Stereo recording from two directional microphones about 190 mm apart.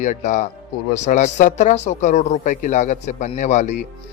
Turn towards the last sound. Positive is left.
turn(degrees=40)  # may be behind; listen again after turning